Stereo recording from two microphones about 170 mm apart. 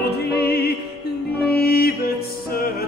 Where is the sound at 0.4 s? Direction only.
70° left (ahead or behind).